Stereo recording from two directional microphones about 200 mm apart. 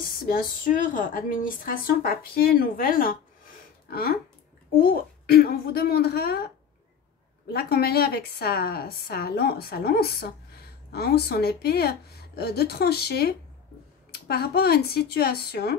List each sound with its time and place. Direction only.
0.3 s speech: 45° left (ahead or behind)
4.7 s speech: 50° left (ahead or behind)
7.5 s speech: 50° left (ahead or behind)